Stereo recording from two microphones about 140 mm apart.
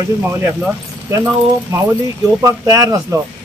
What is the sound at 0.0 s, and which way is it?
Speech, 20° right (ahead or behind).